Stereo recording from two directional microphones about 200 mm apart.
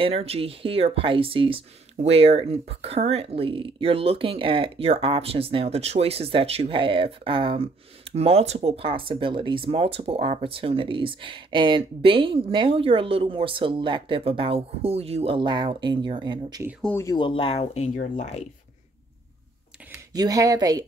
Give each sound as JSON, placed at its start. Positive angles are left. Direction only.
{"t": 0.0, "sound": "speech", "side_deg": -30}
{"t": 16.8, "sound": "speech", "side_deg": 15}
{"t": 20.2, "sound": "speech", "side_deg": -15}